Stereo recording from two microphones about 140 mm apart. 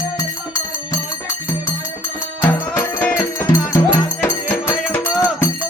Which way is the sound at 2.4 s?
15° left (ahead or behind).